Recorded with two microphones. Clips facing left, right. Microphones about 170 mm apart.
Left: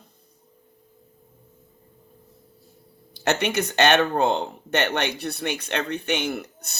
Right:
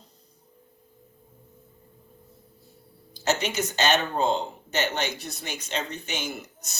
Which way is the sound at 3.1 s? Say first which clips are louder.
Left 3 dB; 60° left (ahead or behind).